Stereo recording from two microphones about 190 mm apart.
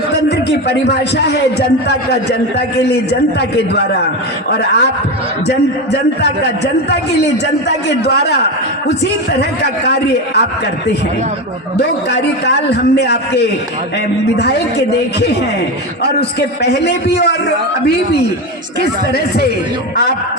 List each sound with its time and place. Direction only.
0.1 s a man's voice: 60° left (ahead or behind)
7.9 s a man's voice: 60° left (ahead or behind)
11.8 s a man's voice: 60° left (ahead or behind)
18.8 s a man's voice: 55° left (ahead or behind)